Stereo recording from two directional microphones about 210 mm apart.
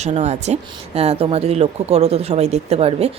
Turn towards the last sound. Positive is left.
turn(degrees=-30)  # may be behind; listen again after turning